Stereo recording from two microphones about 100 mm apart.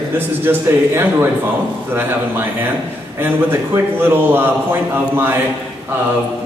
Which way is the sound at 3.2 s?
25° right (ahead or behind).